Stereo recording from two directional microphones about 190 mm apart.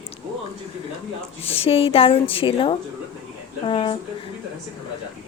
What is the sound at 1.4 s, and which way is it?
A woman's voice, 30° left (ahead or behind).